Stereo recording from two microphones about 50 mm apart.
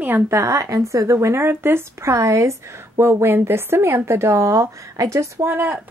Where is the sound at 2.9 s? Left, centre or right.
Right.